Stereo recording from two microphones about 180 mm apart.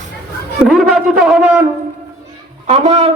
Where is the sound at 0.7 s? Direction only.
Centre (ahead or behind).